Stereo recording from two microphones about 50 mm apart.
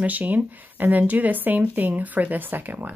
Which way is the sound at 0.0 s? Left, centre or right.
Right.